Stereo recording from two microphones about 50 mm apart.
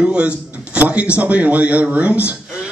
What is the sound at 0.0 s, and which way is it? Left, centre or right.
A man's voice, right.